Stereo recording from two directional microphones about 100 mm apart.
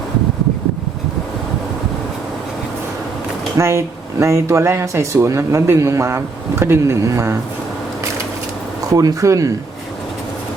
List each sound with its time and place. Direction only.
3.6 s speech: 30° right (ahead or behind)
8.9 s speech: 35° right (ahead or behind)